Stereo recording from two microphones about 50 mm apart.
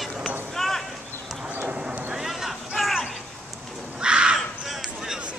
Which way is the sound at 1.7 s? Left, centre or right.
Centre.